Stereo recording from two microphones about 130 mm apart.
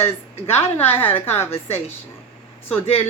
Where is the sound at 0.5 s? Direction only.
15° left (ahead or behind).